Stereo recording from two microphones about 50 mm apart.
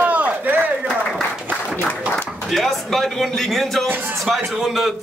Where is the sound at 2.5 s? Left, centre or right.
Centre.